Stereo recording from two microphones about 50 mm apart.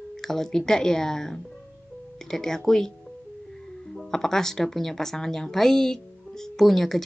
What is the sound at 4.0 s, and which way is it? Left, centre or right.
Speech, centre.